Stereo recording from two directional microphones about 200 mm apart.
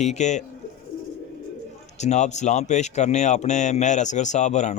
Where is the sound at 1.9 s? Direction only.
35° left (ahead or behind).